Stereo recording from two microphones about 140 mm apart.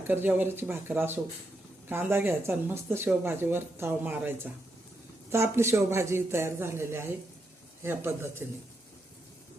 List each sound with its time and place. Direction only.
0.1 s speech: 15° right (ahead or behind)